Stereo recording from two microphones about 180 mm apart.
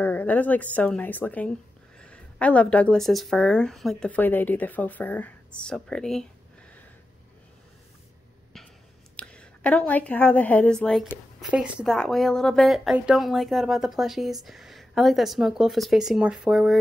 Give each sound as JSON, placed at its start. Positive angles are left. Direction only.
{"t": 0.0, "sound": "a woman's voice", "side_deg": 10}
{"t": 8.5, "sound": "a sound", "side_deg": 0}
{"t": 9.1, "sound": "a woman's voice", "side_deg": 5}